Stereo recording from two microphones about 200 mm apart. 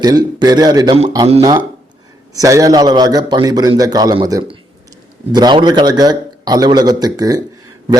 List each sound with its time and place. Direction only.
0.0 s a man's voice: 20° right (ahead or behind)